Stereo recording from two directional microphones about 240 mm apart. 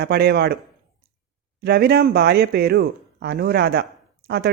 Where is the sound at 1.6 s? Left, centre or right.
Right.